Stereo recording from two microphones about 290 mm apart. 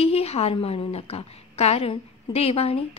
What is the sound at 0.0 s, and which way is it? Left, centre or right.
A woman's voice, left.